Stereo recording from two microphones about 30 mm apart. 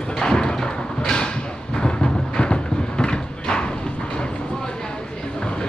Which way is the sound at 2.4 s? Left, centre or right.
Left.